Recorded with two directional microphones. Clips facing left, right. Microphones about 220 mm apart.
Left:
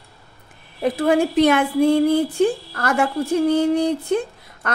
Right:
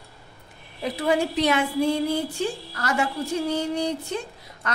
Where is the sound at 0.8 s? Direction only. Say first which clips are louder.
Left 6 dB; 50° left (ahead or behind).